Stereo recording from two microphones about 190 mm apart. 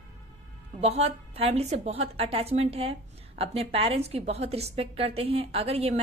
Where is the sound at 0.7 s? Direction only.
35° right (ahead or behind).